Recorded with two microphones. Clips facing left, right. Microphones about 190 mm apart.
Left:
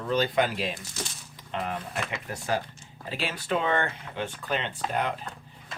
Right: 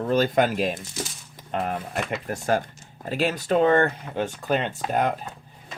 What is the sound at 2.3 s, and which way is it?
Speech, 50° right (ahead or behind).